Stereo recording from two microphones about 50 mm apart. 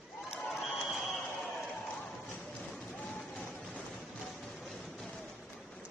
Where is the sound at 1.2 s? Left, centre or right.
Left.